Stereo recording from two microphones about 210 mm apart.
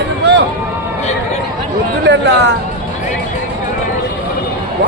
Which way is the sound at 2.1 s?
55° right (ahead or behind).